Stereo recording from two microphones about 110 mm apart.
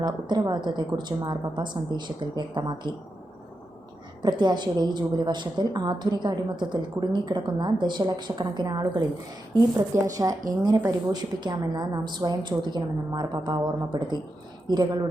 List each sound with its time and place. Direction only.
0.0 s a woman's voice: 40° right (ahead or behind)
4.2 s a woman's voice: 40° right (ahead or behind)